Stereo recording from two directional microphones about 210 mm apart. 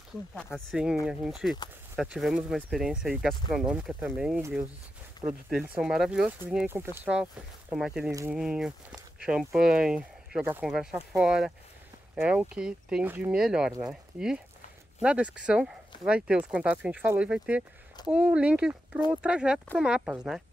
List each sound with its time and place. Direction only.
0.3 s speech: 5° left (ahead or behind)
8.1 s speech: 15° right (ahead or behind)
8.4 s speech: centre (ahead or behind)
15.0 s speech: 5° right (ahead or behind)